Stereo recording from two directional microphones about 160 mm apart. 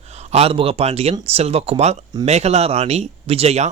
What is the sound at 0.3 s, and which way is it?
Speech, 40° right (ahead or behind).